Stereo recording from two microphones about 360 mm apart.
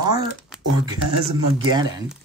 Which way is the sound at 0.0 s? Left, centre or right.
Centre.